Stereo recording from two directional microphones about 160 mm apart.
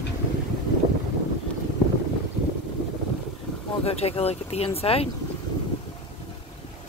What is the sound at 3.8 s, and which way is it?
Speech, 40° left (ahead or behind).